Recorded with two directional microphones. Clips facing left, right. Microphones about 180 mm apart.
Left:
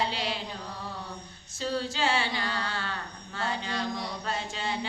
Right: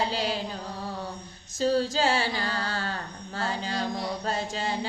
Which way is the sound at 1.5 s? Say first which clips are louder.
Right 7 dB; 40° right (ahead or behind).